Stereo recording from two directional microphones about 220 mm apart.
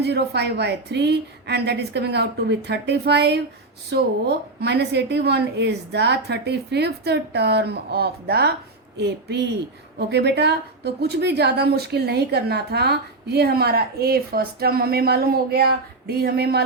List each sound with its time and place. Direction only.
0.0 s a woman's voice: 50° right (ahead or behind)